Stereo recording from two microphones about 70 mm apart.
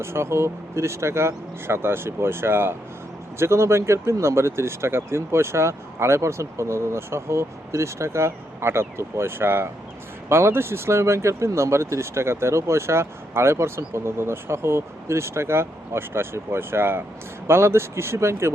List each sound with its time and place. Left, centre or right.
0.0 s speech: right